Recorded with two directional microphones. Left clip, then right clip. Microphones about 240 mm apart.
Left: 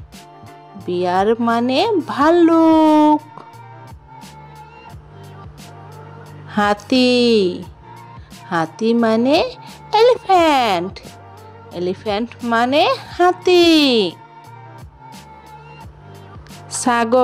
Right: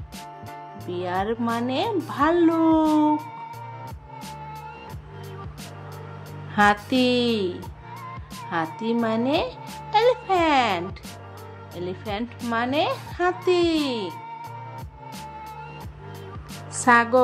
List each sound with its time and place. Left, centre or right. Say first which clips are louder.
0.8 s speech: left 10 dB; left
6.5 s speech: left 3 dB; left
16.7 s speech: left 2 dB; left